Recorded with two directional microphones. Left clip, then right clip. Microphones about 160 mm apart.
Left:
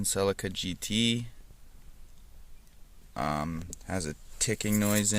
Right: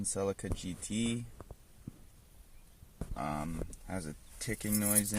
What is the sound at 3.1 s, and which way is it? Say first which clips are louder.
Speech: left 6 dB; 20° left (ahead or behind).